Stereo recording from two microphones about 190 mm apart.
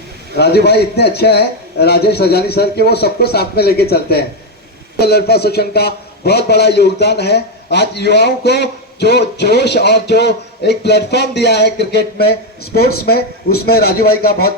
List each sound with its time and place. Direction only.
0.3 s a man's voice: 60° left (ahead or behind)